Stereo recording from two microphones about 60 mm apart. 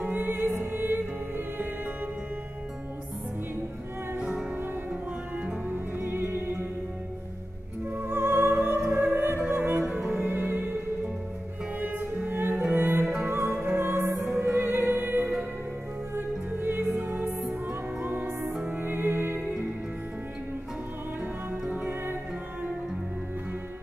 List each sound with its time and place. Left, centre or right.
0.0 s music: right
5.7 s music: right
7.9 s music: right
11.8 s music: right
13.8 s music: right
21.2 s music: right